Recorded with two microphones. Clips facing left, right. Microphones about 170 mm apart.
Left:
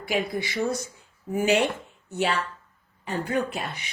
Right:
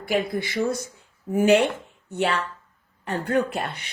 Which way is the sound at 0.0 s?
50° right (ahead or behind).